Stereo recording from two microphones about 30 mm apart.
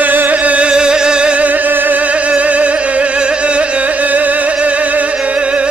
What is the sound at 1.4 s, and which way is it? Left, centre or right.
Music, right.